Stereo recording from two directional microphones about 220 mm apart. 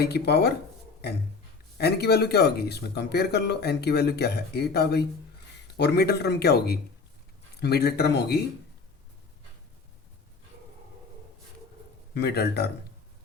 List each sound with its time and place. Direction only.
0.0 s speech: 45° left (ahead or behind)
1.8 s speech: 45° left (ahead or behind)
12.1 s speech: 45° left (ahead or behind)